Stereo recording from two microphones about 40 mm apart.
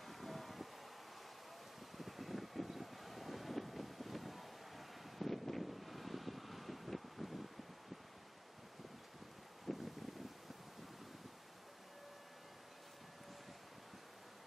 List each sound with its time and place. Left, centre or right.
0.0 s vehicle: centre
2.0 s vehicle: centre
9.7 s wind: centre